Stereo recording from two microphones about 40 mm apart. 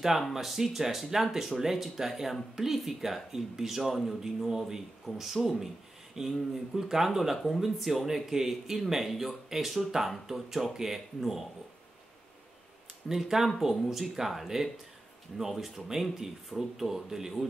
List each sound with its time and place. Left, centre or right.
0.3 s speech: centre
13.1 s speech: centre